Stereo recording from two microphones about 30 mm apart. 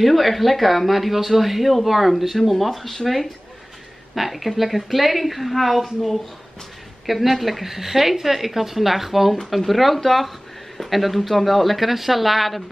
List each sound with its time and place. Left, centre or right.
0.0 s speech: centre
4.1 s a woman's voice: centre